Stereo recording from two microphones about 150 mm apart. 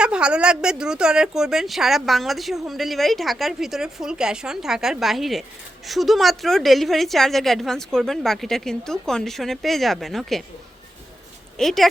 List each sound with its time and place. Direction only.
0.0 s speech: 5° right (ahead or behind)
11.5 s speech: centre (ahead or behind)